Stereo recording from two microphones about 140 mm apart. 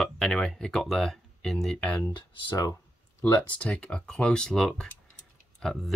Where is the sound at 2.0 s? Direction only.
25° left (ahead or behind).